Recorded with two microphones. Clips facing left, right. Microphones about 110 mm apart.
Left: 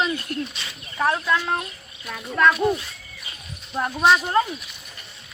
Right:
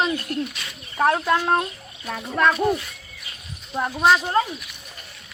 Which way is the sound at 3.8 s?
5° right (ahead or behind).